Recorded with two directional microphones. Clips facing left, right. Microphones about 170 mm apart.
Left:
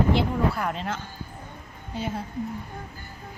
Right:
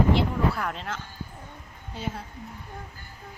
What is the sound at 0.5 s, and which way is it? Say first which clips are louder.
Speech: left 3 dB; 5° left (ahead or behind).